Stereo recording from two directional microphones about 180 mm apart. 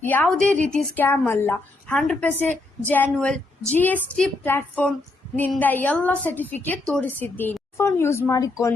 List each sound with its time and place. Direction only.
0.0 s a woman's voice: 10° left (ahead or behind)